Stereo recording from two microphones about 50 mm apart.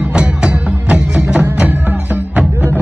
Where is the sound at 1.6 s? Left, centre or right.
Right.